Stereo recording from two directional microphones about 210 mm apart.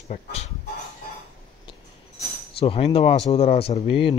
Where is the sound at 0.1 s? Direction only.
30° left (ahead or behind).